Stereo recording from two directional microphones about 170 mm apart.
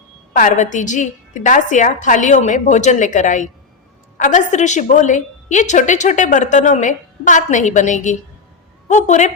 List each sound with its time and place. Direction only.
0.3 s a woman's voice: 50° left (ahead or behind)